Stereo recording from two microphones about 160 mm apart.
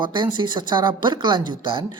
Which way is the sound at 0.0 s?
30° right (ahead or behind).